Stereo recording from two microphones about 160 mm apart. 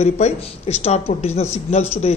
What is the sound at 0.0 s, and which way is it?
A man's voice, 40° left (ahead or behind).